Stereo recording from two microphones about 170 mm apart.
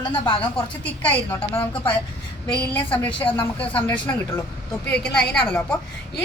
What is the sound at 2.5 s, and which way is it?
A woman's voice, 10° left (ahead or behind).